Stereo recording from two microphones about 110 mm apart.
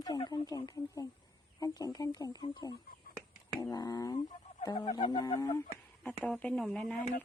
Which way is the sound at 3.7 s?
35° left (ahead or behind).